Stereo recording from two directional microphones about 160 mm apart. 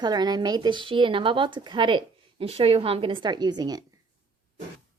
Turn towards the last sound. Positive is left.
turn(degrees=-25)  # may be behind; listen again after turning